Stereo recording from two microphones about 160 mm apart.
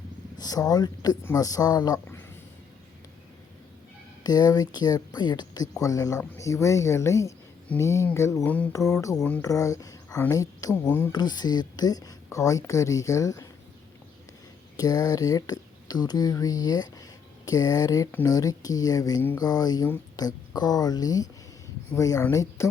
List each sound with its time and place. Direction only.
0.3 s speech: 25° left (ahead or behind)
4.2 s speech: 25° left (ahead or behind)
11.1 s speech: 25° left (ahead or behind)
14.8 s speech: 25° left (ahead or behind)